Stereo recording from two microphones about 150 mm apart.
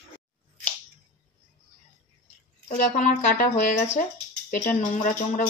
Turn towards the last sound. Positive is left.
turn(degrees=60)  # may be behind; listen again after turning